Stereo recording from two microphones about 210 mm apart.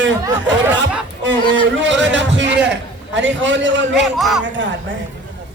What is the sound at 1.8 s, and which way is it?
A man's voice, 60° right (ahead or behind).